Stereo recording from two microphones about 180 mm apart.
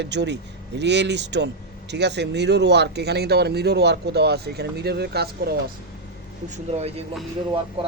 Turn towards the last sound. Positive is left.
turn(degrees=-30)  # may be behind; listen again after turning